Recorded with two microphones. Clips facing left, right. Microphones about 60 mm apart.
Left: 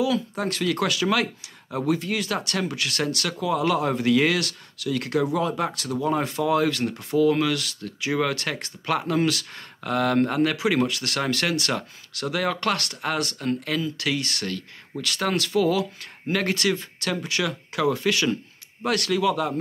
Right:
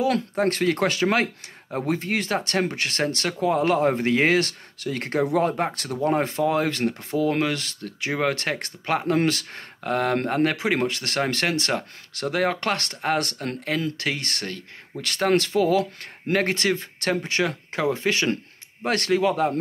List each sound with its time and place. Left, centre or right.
0.1 s speech: right